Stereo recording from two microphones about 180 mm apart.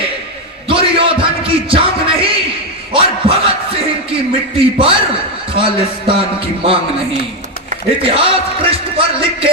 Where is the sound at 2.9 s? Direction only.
30° right (ahead or behind).